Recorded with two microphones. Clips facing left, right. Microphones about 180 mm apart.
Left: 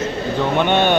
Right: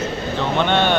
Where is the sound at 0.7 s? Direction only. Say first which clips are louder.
Left 2 dB; 15° left (ahead or behind).